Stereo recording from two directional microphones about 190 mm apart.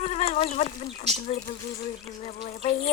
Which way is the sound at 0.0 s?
35° left (ahead or behind).